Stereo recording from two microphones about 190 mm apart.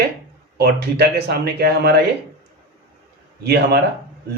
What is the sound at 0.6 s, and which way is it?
A man's voice, 60° right (ahead or behind).